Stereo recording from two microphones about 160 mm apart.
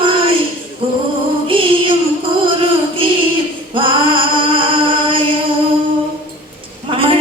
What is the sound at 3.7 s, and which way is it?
Singing, 35° right (ahead or behind).